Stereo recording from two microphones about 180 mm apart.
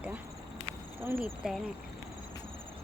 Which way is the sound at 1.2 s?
Centre (ahead or behind).